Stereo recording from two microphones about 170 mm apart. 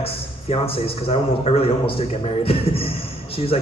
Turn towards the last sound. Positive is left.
turn(degrees=35)  # may be behind; listen again after turning